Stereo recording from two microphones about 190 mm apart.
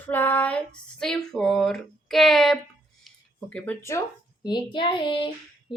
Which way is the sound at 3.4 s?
5° left (ahead or behind).